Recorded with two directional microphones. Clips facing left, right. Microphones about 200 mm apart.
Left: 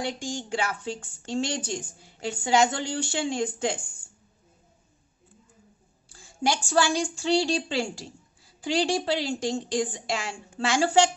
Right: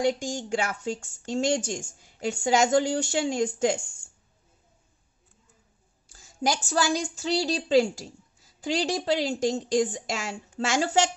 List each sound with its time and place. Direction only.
0.0 s a woman's voice: 45° right (ahead or behind)
6.0 s a woman's voice: 40° right (ahead or behind)